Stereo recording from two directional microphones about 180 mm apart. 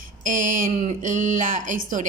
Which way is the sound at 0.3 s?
45° right (ahead or behind).